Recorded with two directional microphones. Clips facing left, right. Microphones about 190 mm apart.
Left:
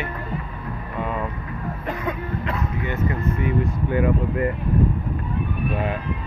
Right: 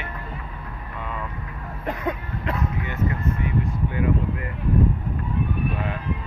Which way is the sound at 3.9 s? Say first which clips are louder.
Left 4 dB; 55° left (ahead or behind).